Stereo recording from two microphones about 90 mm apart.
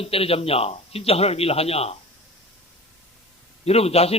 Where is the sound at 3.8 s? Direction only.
90° left.